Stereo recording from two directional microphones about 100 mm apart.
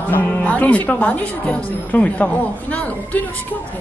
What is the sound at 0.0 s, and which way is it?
A man's voice, 15° left (ahead or behind).